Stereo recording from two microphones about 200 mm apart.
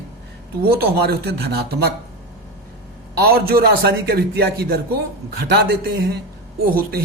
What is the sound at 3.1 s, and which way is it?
A man's voice, 50° right (ahead or behind).